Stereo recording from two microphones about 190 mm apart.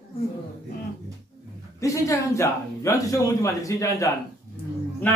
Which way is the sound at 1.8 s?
15° left (ahead or behind).